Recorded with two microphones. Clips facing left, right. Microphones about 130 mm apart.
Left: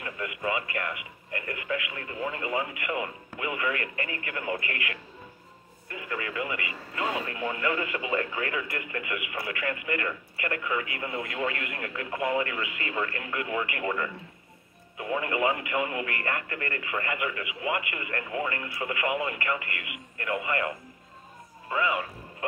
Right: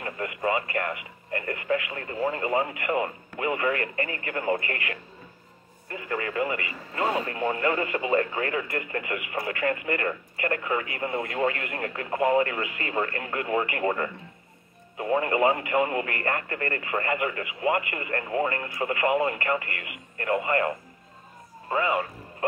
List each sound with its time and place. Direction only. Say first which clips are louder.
0.0 s speech: right 4 dB; 40° right (ahead or behind)